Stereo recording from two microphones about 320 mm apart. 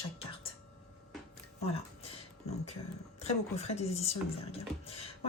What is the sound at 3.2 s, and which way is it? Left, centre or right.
Speech, centre.